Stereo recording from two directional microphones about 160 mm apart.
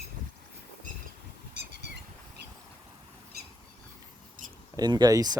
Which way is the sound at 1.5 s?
90° right.